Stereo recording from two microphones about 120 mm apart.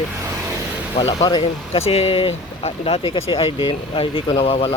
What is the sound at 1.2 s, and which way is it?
Speech, 40° left (ahead or behind).